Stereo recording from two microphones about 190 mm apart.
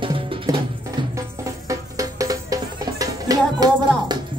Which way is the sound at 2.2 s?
20° right (ahead or behind).